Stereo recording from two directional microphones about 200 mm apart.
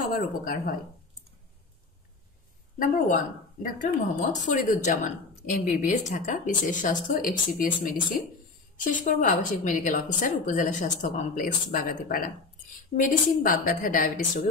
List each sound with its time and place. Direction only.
0.0 s a woman's voice: 45° left (ahead or behind)
3.6 s speech: 40° left (ahead or behind)
13.4 s a woman's voice: 45° left (ahead or behind)